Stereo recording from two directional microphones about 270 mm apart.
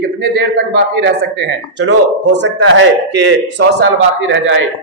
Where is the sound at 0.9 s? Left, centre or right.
Right.